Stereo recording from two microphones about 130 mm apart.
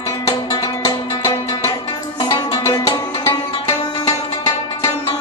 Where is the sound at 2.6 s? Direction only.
20° left (ahead or behind).